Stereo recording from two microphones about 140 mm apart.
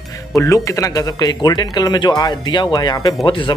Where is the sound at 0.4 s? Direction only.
20° left (ahead or behind).